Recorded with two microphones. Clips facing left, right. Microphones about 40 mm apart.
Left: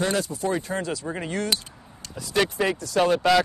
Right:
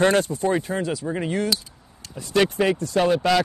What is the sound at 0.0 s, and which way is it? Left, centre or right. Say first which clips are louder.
Speech: right 6 dB; right.